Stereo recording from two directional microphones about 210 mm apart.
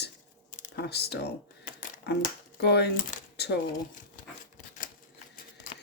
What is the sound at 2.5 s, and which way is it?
Speech, 50° left (ahead or behind).